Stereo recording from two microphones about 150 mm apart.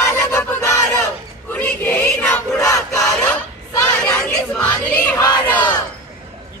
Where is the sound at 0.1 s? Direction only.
15° left (ahead or behind).